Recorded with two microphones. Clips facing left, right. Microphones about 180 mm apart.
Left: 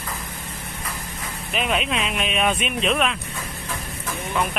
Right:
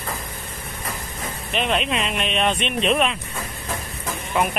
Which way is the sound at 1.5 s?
5° left (ahead or behind).